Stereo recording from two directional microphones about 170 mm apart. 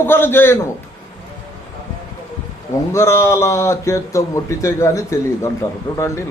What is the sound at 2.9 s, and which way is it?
A man's voice, 15° left (ahead or behind).